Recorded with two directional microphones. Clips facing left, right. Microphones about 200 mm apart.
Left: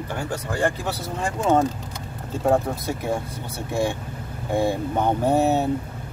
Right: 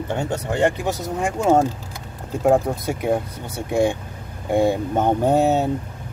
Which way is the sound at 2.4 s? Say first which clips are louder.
Right 3 dB; 10° right (ahead or behind).